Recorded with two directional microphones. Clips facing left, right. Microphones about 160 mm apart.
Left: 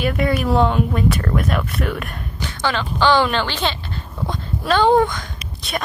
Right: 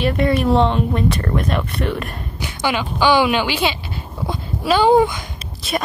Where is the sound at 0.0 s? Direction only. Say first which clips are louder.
Right 2 dB; centre (ahead or behind).